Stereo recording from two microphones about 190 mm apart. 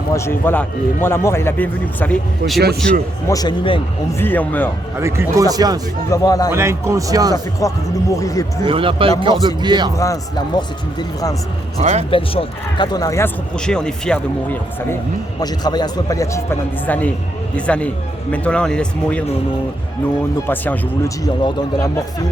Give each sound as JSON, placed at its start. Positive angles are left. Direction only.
{"t": 0.1, "sound": "speech", "side_deg": 15}
{"t": 3.2, "sound": "speech", "side_deg": 20}
{"t": 4.2, "sound": "speech", "side_deg": 10}
{"t": 4.9, "sound": "speech", "side_deg": -15}
{"t": 6.1, "sound": "speech", "side_deg": 20}
{"t": 6.5, "sound": "speech", "side_deg": -15}
{"t": 7.6, "sound": "speech", "side_deg": 15}
{"t": 8.6, "sound": "speech", "side_deg": -25}
{"t": 10.0, "sound": "speech", "side_deg": 20}
{"t": 11.8, "sound": "speech", "side_deg": -35}
{"t": 12.1, "sound": "speech", "side_deg": 30}
{"t": 13.6, "sound": "speech", "side_deg": 5}
{"t": 15.4, "sound": "speech", "side_deg": 20}
{"t": 20.5, "sound": "speech", "side_deg": 10}